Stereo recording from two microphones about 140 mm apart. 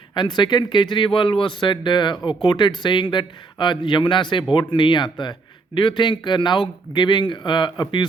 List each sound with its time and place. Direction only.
0.1 s a man's voice: 30° left (ahead or behind)